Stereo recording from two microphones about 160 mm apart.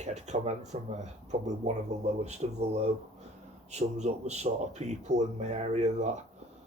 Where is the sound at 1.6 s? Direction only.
45° right (ahead or behind).